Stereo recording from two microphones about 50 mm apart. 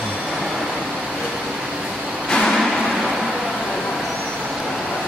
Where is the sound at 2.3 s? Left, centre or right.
Centre.